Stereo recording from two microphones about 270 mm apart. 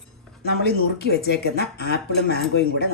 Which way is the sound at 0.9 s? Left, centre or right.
Left.